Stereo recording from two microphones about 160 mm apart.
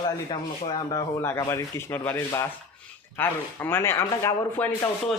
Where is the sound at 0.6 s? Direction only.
30° left (ahead or behind).